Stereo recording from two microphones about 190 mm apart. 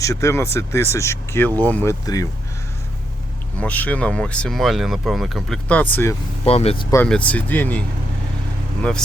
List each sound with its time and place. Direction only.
0.0 s speech: 15° left (ahead or behind)
3.6 s speech: 10° left (ahead or behind)
6.4 s speech: 30° left (ahead or behind)
6.9 s speech: 10° left (ahead or behind)